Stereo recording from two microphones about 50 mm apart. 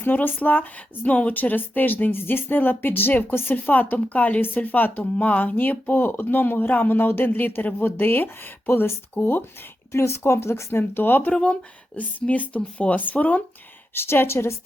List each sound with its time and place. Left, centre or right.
0.0 s speech: left
3.5 s speech: left
4.4 s speech: left
9.9 s speech: left
12.2 s speech: left
13.9 s speech: left